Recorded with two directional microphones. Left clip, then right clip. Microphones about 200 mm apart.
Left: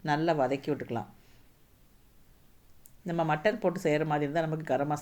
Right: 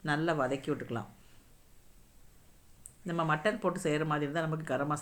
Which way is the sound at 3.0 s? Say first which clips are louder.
Left 3 dB; centre (ahead or behind).